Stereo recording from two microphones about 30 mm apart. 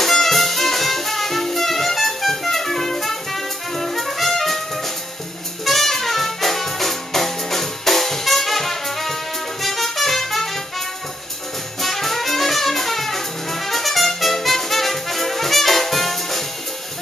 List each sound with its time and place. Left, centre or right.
0.0 s music: centre
11.8 s music: centre